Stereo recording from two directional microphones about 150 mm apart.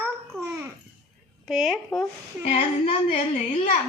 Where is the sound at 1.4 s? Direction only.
Centre (ahead or behind).